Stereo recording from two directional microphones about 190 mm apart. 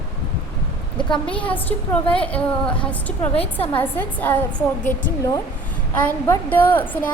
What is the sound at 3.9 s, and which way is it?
Speech, 10° left (ahead or behind).